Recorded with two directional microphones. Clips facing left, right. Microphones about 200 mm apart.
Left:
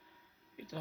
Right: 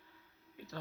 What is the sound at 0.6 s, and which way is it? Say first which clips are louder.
Music: left 3 dB; 15° left (ahead or behind).